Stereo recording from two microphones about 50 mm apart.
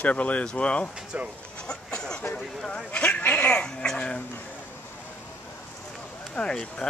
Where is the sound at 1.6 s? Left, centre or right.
Centre.